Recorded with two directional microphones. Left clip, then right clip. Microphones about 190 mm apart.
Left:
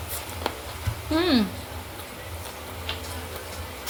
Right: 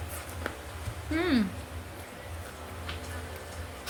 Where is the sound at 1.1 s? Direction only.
15° right (ahead or behind).